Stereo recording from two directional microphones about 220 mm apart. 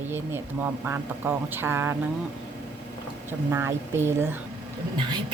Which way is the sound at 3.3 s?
10° right (ahead or behind).